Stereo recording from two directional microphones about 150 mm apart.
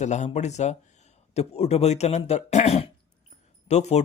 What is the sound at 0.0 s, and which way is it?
Speech, 50° left (ahead or behind).